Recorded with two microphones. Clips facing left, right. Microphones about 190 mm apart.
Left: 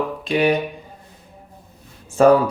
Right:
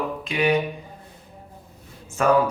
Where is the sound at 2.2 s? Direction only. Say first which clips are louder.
Left 8 dB; 30° left (ahead or behind).